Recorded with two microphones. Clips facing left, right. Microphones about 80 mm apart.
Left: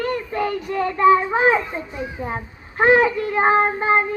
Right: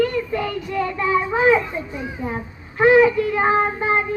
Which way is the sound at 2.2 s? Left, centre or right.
Left.